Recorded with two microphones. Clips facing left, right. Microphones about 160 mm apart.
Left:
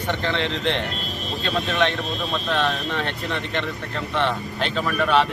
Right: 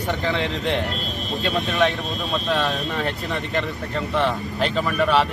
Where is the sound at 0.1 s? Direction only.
Centre (ahead or behind).